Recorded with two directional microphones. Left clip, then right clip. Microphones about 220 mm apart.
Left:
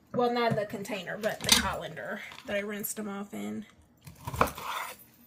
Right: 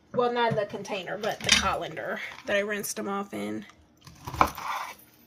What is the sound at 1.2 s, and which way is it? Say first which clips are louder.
Speech: right 2 dB; 30° right (ahead or behind).